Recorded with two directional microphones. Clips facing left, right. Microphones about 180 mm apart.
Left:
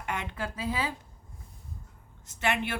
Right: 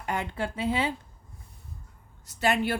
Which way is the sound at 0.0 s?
35° right (ahead or behind).